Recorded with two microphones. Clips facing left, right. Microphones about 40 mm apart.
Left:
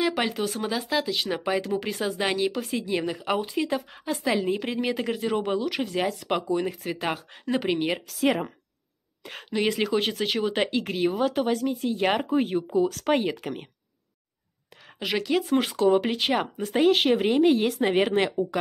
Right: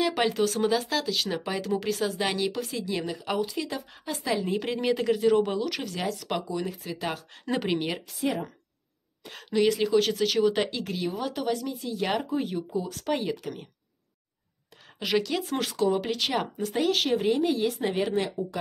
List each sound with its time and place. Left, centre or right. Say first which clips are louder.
0.0 s speech: right 1 dB; centre
2.6 s speech: left 3 dB; left
4.5 s speech: even; centre; by 6.4 s left
6.4 s speech: left 5 dB; left
7.6 s speech: left 3 dB; centre
9.7 s speech: even; left
15.0 s speech: left 1 dB; centre
15.8 s speech: left 3 dB; left
16.2 s speech: left 3 dB; left
16.6 s speech: left 6 dB; left